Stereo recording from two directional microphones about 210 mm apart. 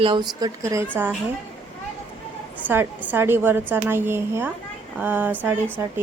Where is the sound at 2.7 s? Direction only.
10° right (ahead or behind).